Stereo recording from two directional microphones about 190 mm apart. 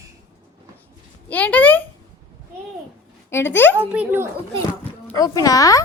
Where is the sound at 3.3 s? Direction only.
10° left (ahead or behind).